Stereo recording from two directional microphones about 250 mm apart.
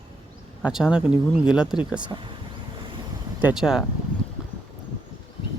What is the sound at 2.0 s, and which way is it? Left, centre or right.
Speech, centre.